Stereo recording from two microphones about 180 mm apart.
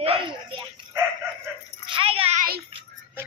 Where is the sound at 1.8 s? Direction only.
30° right (ahead or behind).